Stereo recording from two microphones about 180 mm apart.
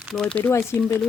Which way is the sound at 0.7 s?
15° left (ahead or behind).